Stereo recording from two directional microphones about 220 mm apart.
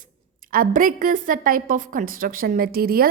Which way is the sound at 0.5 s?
40° right (ahead or behind).